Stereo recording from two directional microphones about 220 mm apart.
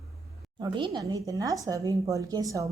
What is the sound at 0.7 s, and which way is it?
A woman's voice, 20° right (ahead or behind).